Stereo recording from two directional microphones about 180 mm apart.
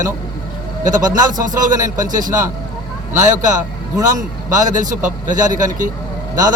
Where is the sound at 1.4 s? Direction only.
45° right (ahead or behind).